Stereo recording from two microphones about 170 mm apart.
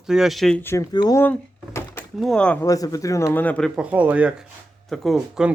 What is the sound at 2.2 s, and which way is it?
Speech, 5° left (ahead or behind).